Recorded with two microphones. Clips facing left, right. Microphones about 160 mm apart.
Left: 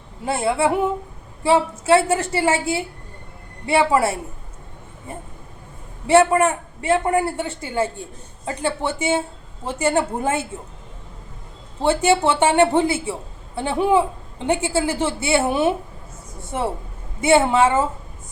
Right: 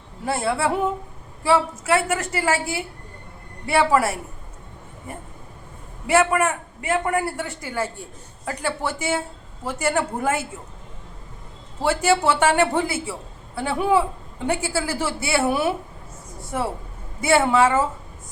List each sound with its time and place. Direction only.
0.3 s a man's voice: 20° left (ahead or behind)
6.1 s a man's voice: 30° left (ahead or behind)
11.8 s a man's voice: 25° left (ahead or behind)